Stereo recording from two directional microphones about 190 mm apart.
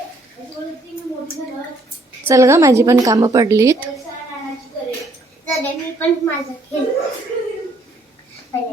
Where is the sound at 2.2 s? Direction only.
15° right (ahead or behind).